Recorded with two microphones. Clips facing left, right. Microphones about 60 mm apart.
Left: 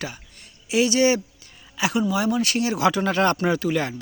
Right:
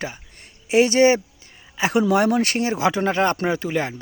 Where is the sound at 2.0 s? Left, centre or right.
Right.